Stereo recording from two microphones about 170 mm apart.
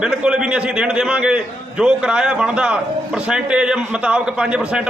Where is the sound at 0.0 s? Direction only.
5° right (ahead or behind).